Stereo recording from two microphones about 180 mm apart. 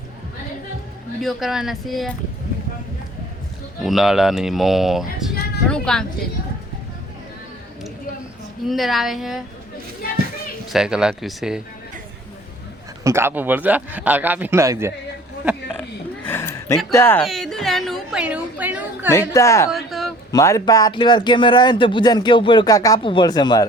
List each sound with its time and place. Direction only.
1.2 s speech: centre (ahead or behind)
3.8 s speech: centre (ahead or behind)
8.6 s speech: centre (ahead or behind)
10.7 s speech: 5° right (ahead or behind)
13.1 s a man's voice: 15° right (ahead or behind)
16.2 s a sound: 10° left (ahead or behind)
16.9 s speech: 15° left (ahead or behind)
17.2 s a woman's voice: centre (ahead or behind)
19.3 s speech: 15° left (ahead or behind)
19.7 s a sound: centre (ahead or behind)
20.3 s speech: 20° left (ahead or behind)